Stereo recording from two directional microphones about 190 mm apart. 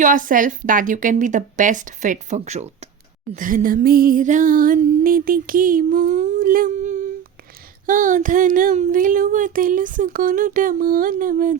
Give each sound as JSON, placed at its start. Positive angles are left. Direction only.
{"t": 0.0, "sound": "speech", "side_deg": -45}